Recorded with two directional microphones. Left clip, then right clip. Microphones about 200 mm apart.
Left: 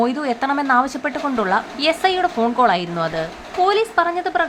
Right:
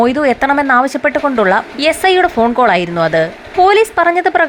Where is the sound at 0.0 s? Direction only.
20° right (ahead or behind).